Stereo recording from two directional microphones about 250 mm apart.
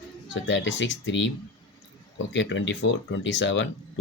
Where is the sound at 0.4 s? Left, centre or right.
Left.